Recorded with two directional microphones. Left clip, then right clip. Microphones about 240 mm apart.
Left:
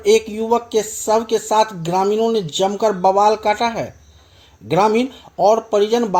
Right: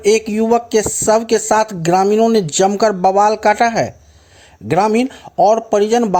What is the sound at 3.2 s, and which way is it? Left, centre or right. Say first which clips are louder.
Speech: right 1 dB; right.